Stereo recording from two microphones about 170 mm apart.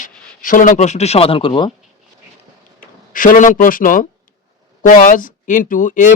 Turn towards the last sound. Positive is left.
turn(degrees=50)  # may be behind; listen again after turning